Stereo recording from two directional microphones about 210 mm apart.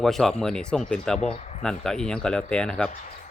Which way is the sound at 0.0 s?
Centre (ahead or behind).